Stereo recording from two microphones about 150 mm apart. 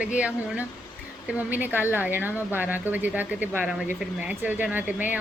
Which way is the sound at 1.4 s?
10° right (ahead or behind).